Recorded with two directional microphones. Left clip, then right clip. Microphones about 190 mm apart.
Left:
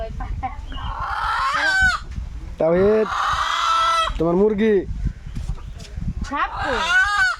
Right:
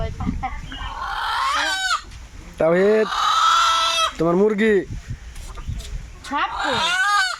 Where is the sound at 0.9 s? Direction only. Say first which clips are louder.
Left 1 dB; centre (ahead or behind).